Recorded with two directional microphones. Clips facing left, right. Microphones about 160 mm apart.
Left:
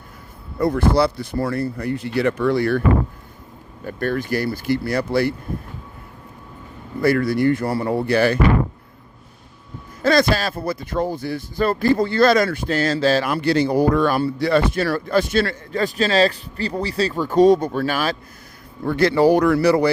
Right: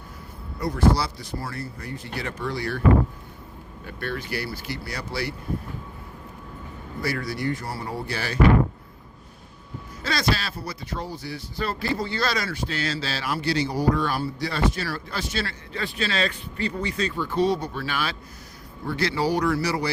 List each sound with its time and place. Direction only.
0.6 s speech: 55° left (ahead or behind)
3.8 s speech: 45° left (ahead or behind)
7.0 s speech: 55° left (ahead or behind)
10.0 s speech: 50° left (ahead or behind)